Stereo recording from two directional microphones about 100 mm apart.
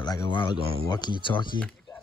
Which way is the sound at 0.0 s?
50° left (ahead or behind).